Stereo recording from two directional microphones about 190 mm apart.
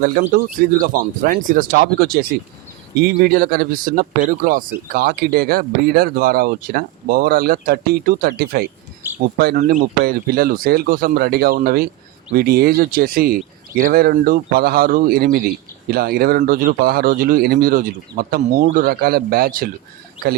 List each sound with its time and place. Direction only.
0.0 s speech: 45° right (ahead or behind)
9.0 s speech: 10° right (ahead or behind)
9.4 s speech: 50° right (ahead or behind)